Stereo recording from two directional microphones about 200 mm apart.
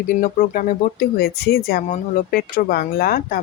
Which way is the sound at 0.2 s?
45° left (ahead or behind).